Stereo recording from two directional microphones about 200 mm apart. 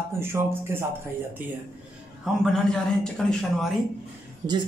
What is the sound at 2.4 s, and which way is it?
A man's voice, 5° left (ahead or behind).